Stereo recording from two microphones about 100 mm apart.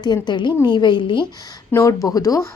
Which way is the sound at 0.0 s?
45° left (ahead or behind).